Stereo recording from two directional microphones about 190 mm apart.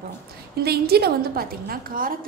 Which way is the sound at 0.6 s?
55° right (ahead or behind).